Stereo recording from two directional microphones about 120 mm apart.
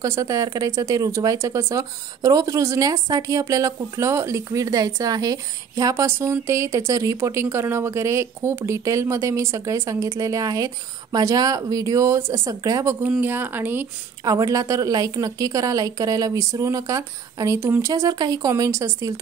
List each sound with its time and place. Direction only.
0.0 s speech: 25° right (ahead or behind)
13.2 s speech: 15° right (ahead or behind)
14.2 s speech: 30° right (ahead or behind)